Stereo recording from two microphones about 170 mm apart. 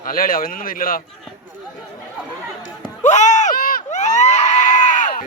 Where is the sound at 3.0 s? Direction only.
45° left (ahead or behind).